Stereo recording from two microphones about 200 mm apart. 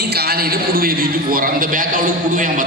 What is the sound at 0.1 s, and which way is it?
A man's voice, 50° right (ahead or behind).